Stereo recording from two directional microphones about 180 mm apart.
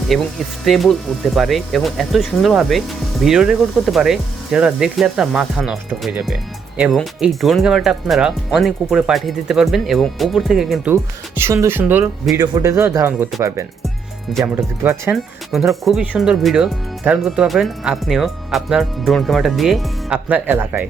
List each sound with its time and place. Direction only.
0.1 s speech: centre (ahead or behind)
10.9 s speech: 15° right (ahead or behind)
14.4 s speech: 10° right (ahead or behind)
15.1 s speech: centre (ahead or behind)